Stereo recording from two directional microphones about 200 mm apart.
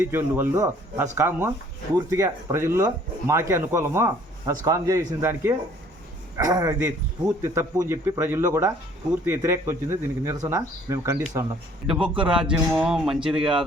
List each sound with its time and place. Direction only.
0.0 s speech: 10° right (ahead or behind)
11.9 s speech: 5° right (ahead or behind)